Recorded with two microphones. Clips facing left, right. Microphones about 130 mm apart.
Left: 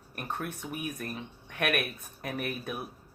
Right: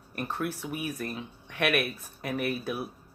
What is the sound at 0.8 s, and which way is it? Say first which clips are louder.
Speech: right 3 dB; 35° right (ahead or behind).